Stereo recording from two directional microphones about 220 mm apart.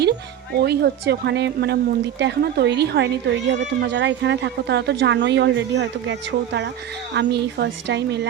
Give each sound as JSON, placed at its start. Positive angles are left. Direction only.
{"t": 0.0, "sound": "speech", "side_deg": -50}